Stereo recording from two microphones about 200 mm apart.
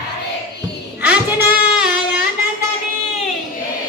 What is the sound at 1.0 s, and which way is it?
Child singing, 5° right (ahead or behind).